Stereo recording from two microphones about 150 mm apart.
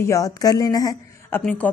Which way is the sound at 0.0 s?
20° left (ahead or behind).